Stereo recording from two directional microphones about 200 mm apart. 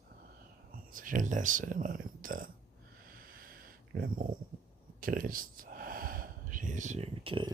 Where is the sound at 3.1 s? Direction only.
45° right (ahead or behind).